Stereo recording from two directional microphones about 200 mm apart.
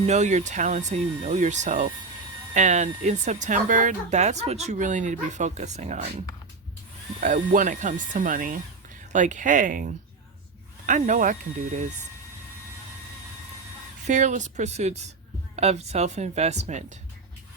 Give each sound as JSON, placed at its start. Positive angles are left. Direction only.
{"t": 0.0, "sound": "speech", "side_deg": -35}
{"t": 14.1, "sound": "speech", "side_deg": -35}